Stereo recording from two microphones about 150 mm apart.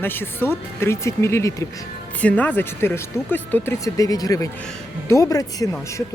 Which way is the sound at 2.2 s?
10° left (ahead or behind).